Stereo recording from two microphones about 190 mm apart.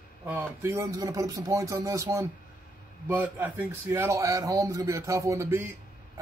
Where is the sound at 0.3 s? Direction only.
10° right (ahead or behind).